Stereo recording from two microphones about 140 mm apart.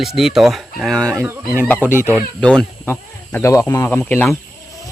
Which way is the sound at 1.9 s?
15° right (ahead or behind).